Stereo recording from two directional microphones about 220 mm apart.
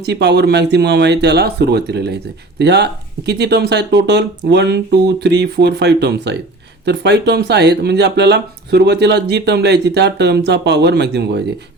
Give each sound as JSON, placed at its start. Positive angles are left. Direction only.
{"t": 0.0, "sound": "speech", "side_deg": -50}